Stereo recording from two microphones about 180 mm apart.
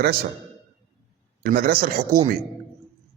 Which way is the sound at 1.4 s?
60° right (ahead or behind).